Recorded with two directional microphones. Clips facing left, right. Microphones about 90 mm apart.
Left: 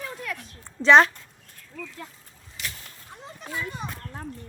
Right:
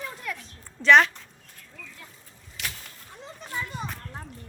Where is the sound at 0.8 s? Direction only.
30° left (ahead or behind).